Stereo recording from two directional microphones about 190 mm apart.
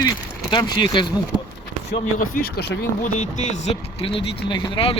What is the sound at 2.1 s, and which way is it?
Speech, 50° left (ahead or behind).